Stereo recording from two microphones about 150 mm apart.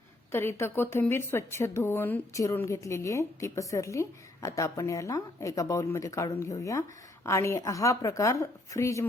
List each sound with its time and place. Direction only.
0.3 s a woman's voice: 15° left (ahead or behind)